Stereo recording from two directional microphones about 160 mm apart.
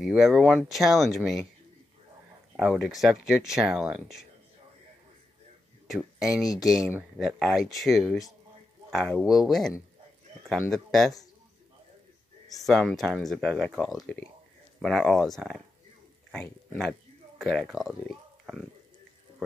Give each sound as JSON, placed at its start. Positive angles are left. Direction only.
{"t": 0.0, "sound": "speech", "side_deg": 0}
{"t": 2.5, "sound": "speech", "side_deg": 0}
{"t": 5.9, "sound": "speech", "side_deg": 0}
{"t": 6.4, "sound": "speech", "side_deg": 20}
{"t": 7.2, "sound": "speech", "side_deg": 0}
{"t": 12.5, "sound": "speech", "side_deg": 0}
{"t": 18.4, "sound": "a sound", "side_deg": 0}